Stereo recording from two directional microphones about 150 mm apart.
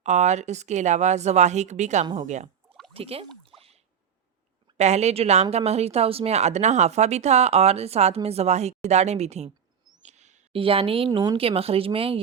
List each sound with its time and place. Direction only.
0.0 s speech: 50° right (ahead or behind)
2.9 s speech: 40° right (ahead or behind)
4.8 s speech: 45° right (ahead or behind)
9.9 s a sound: 50° right (ahead or behind)
10.5 s speech: 35° right (ahead or behind)